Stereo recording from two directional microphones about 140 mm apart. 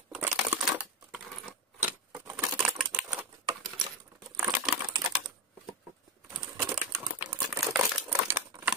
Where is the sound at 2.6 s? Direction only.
Centre (ahead or behind).